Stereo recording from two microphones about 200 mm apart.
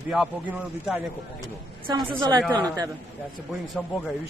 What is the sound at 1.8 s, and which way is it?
A woman's voice, 25° right (ahead or behind).